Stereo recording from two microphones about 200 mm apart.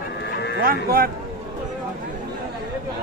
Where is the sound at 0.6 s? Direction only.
45° right (ahead or behind).